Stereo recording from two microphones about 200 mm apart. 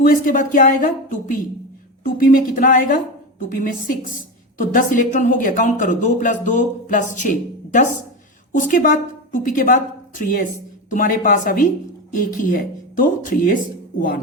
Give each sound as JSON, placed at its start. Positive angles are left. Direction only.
{"t": 0.0, "sound": "a woman's voice", "side_deg": 45}